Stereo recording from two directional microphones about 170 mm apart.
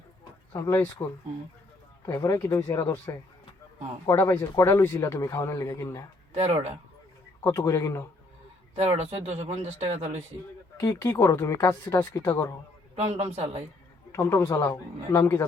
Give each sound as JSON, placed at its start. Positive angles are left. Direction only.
{"t": 0.5, "sound": "speech", "side_deg": 15}
{"t": 2.0, "sound": "speech", "side_deg": 20}
{"t": 6.3, "sound": "speech", "side_deg": -40}
{"t": 7.4, "sound": "speech", "side_deg": 20}
{"t": 8.7, "sound": "speech", "side_deg": -40}
{"t": 10.8, "sound": "speech", "side_deg": 15}
{"t": 13.3, "sound": "speech", "side_deg": -40}
{"t": 14.1, "sound": "speech", "side_deg": 15}